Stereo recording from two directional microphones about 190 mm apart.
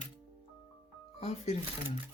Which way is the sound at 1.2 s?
35° left (ahead or behind).